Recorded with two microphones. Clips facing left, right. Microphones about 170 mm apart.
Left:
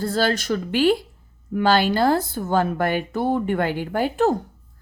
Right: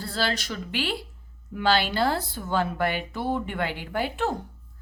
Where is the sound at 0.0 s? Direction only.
45° left (ahead or behind).